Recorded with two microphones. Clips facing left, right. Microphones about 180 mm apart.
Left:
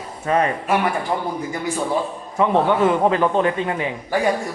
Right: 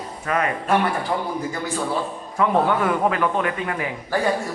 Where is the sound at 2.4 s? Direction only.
20° left (ahead or behind).